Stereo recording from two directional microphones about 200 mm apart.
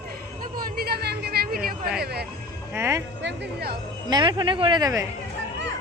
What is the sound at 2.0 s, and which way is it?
Speech, 55° right (ahead or behind).